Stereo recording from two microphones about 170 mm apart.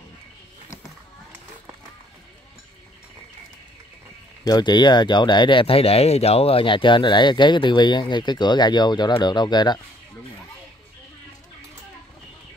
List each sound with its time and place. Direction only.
4.5 s speech: 25° left (ahead or behind)